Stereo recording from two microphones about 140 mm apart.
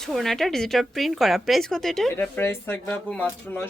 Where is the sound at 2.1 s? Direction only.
15° left (ahead or behind).